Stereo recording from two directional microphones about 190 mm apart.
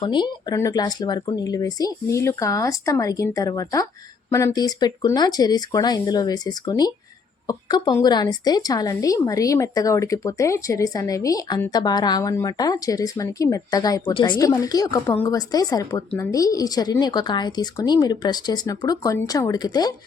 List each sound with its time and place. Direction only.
0.0 s a woman's voice: 25° left (ahead or behind)